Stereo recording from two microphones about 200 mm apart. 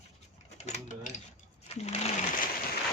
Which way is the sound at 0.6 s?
35° left (ahead or behind).